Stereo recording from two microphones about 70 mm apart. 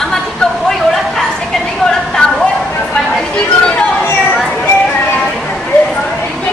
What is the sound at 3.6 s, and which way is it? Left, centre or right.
Speech, centre.